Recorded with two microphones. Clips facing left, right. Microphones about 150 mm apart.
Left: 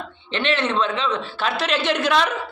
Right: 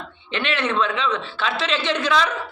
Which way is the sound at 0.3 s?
30° left (ahead or behind).